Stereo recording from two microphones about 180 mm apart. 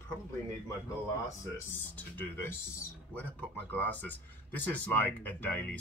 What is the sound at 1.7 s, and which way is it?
Speech, 15° left (ahead or behind).